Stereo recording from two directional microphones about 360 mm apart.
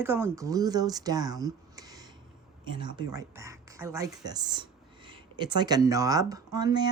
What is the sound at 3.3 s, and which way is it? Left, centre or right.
Speech, centre.